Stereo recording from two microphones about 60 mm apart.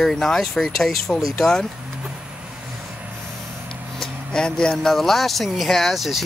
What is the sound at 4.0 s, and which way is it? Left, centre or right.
Speech, centre.